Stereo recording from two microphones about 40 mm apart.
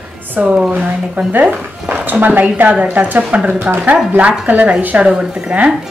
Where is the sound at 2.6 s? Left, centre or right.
Right.